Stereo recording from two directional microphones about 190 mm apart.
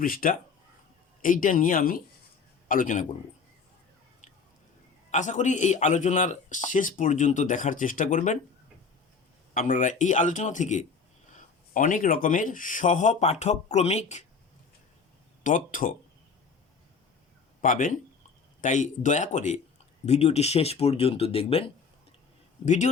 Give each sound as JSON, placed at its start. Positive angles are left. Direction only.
{"t": 0.0, "sound": "a man's voice", "side_deg": 50}
{"t": 5.1, "sound": "a man's voice", "side_deg": 40}
{"t": 9.6, "sound": "a man's voice", "side_deg": 40}
{"t": 15.4, "sound": "speech", "side_deg": 45}
{"t": 17.6, "sound": "a man's voice", "side_deg": 45}